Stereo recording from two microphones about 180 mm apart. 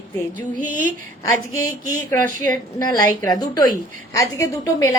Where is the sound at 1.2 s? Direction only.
20° left (ahead or behind).